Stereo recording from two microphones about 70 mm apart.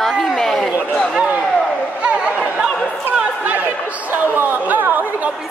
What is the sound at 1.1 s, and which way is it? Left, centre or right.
Speech, centre.